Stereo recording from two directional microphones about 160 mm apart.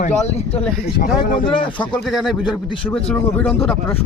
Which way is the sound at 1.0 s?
60° left (ahead or behind).